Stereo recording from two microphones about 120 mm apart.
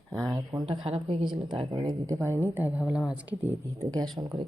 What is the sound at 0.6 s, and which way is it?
Speech, 50° right (ahead or behind).